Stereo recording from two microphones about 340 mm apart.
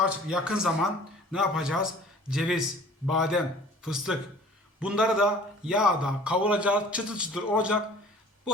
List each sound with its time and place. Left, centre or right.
0.0 s a man's voice: centre